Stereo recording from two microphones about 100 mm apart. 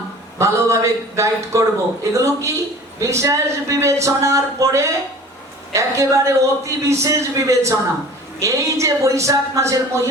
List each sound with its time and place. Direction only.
0.3 s a man's voice: 30° right (ahead or behind)